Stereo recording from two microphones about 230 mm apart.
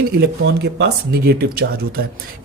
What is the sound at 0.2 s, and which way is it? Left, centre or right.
A woman's voice, right.